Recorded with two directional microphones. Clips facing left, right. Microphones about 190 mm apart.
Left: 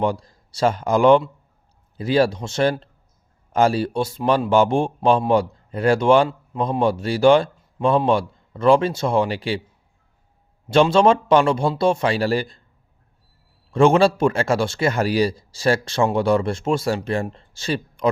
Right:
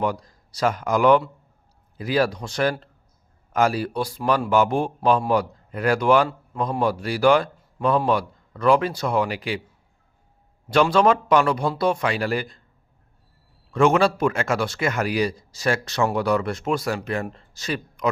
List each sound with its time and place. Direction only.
0.0 s speech: 30° left (ahead or behind)
10.7 s speech: 25° left (ahead or behind)
13.7 s speech: 30° left (ahead or behind)